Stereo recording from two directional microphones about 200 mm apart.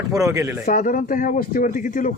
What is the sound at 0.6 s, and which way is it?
A man's voice, 40° left (ahead or behind).